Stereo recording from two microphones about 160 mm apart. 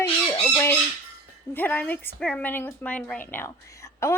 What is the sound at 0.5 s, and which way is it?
Squawk, 15° left (ahead or behind).